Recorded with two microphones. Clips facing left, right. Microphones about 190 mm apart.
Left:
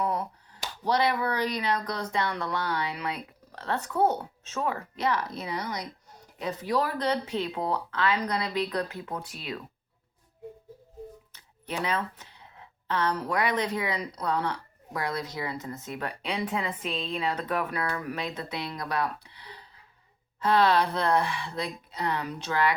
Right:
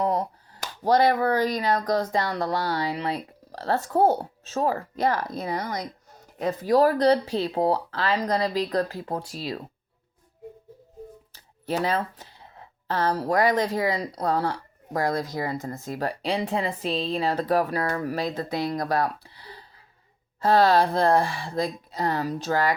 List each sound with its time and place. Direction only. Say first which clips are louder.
0.0 s speech: right 5 dB; 35° right (ahead or behind)
11.3 s speech: right 6 dB; 40° right (ahead or behind)